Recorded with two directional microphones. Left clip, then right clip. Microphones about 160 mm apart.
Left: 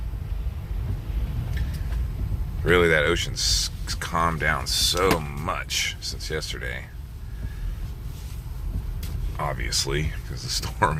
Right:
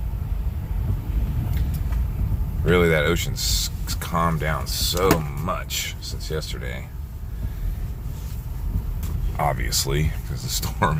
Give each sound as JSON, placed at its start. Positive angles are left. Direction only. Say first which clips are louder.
{"t": 2.6, "sound": "speech", "louder": "even", "side_deg": 0}
{"t": 9.4, "sound": "speech", "louder": "right 3 dB", "side_deg": -15}